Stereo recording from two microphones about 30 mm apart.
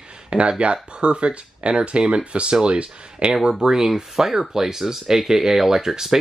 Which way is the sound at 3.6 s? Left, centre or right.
Centre.